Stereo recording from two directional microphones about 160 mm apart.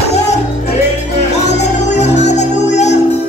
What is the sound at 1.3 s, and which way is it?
Music, 45° left (ahead or behind).